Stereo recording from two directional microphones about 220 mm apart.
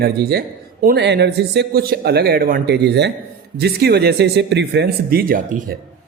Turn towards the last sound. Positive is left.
turn(degrees=-35)  # may be behind; listen again after turning